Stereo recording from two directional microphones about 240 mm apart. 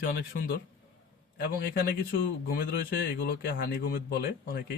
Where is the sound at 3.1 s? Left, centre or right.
Left.